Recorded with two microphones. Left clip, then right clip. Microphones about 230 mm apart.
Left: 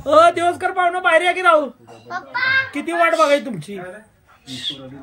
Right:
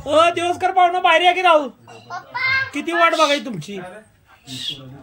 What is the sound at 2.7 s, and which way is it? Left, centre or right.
Speech, centre.